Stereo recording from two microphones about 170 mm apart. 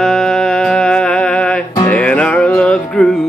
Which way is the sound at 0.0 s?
Centre (ahead or behind).